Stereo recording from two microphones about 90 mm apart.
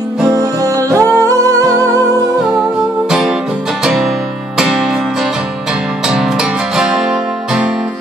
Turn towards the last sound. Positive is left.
turn(degrees=-10)  # may be behind; listen again after turning